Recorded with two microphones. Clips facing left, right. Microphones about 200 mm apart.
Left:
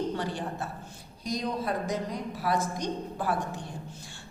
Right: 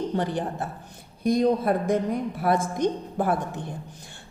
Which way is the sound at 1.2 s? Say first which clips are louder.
Right 10 dB; 55° right (ahead or behind).